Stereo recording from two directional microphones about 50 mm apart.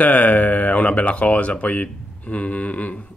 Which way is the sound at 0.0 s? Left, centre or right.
Left.